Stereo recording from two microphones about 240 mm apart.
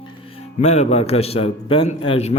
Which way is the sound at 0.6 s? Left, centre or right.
Left.